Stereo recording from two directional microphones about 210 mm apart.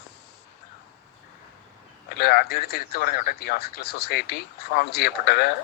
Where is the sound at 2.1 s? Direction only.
50° left (ahead or behind).